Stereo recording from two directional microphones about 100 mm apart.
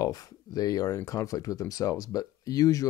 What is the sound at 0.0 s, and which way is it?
Speech, 40° left (ahead or behind).